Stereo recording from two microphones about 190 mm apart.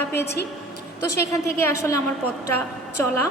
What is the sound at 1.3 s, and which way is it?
Speech, 15° left (ahead or behind).